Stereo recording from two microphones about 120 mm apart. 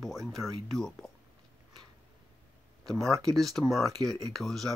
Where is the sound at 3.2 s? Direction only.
Centre (ahead or behind).